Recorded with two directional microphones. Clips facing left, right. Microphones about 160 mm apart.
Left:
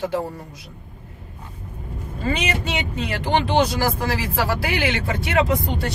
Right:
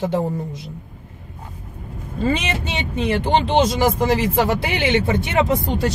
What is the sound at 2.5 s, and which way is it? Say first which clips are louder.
Speech: even; 25° right (ahead or behind).